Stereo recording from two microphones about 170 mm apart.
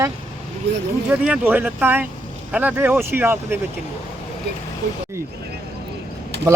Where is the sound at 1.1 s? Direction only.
10° right (ahead or behind).